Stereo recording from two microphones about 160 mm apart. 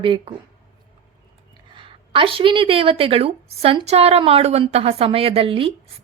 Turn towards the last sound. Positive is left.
turn(degrees=-35)  # may be behind; listen again after turning